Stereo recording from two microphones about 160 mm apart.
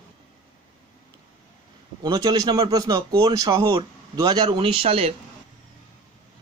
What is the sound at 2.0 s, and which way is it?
Speech, 25° right (ahead or behind).